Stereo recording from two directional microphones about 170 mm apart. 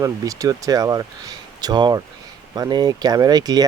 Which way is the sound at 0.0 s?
20° right (ahead or behind).